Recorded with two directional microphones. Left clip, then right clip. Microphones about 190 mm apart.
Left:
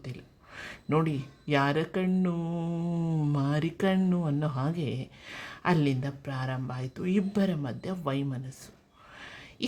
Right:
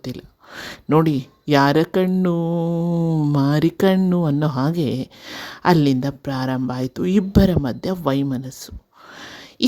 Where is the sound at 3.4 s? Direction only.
45° right (ahead or behind).